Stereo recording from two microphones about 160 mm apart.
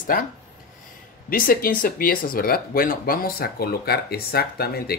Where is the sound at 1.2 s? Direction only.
65° left (ahead or behind).